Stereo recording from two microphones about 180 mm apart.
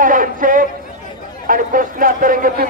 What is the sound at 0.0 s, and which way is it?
A man's voice, 50° right (ahead or behind).